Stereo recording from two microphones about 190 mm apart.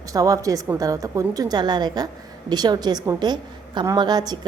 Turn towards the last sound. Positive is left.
turn(degrees=-20)  # may be behind; listen again after turning